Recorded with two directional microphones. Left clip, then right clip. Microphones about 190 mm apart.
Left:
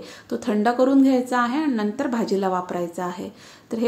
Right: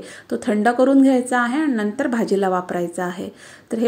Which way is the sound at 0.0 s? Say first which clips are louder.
Right 3 dB; 15° right (ahead or behind).